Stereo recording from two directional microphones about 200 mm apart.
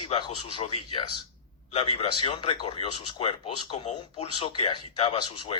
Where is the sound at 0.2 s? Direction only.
30° left (ahead or behind).